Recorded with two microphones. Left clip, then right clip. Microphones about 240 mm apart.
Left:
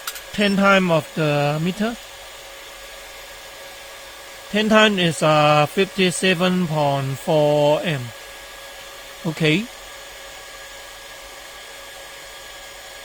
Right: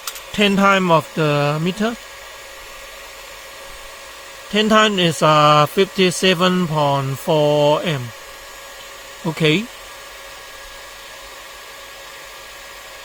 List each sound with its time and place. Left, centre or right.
0.3 s speech: right
4.5 s speech: right
9.2 s speech: right